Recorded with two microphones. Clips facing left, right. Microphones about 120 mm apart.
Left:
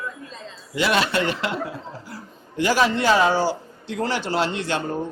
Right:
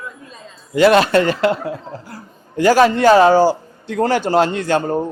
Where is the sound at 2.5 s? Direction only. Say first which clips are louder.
Right 8 dB; 45° right (ahead or behind).